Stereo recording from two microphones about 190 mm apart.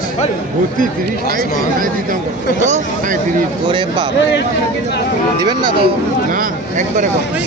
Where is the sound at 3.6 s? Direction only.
25° right (ahead or behind).